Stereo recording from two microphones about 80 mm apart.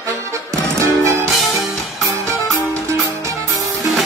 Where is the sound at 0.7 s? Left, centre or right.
Right.